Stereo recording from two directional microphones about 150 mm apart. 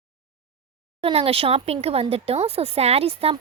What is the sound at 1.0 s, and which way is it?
Speech, 40° right (ahead or behind).